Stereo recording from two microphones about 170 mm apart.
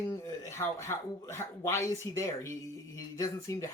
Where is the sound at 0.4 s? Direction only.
15° left (ahead or behind).